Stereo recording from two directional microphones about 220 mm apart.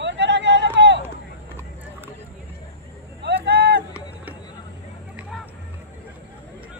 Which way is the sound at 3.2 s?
45° right (ahead or behind).